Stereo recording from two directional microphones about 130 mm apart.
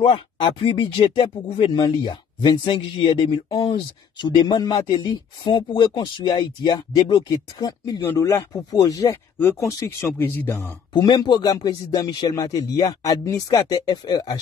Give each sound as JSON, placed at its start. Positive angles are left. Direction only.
{"t": 0.0, "sound": "speech", "side_deg": 35}
{"t": 1.8, "sound": "speech", "side_deg": 30}
{"t": 10.9, "sound": "speech", "side_deg": 35}